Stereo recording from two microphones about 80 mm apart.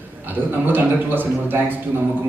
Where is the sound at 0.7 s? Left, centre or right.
Right.